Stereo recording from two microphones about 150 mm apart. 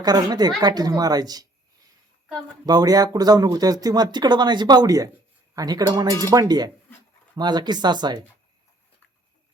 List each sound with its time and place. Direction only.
0.0 s speech: 25° right (ahead or behind)
2.6 s speech: 25° right (ahead or behind)